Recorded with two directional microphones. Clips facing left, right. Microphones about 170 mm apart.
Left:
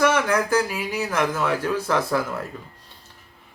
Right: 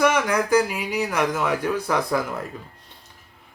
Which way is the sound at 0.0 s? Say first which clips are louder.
Even; 10° right (ahead or behind).